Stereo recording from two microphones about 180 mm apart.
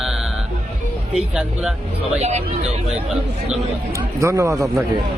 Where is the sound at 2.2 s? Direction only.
40° right (ahead or behind).